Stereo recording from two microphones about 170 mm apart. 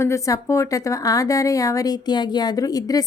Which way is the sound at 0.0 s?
20° left (ahead or behind).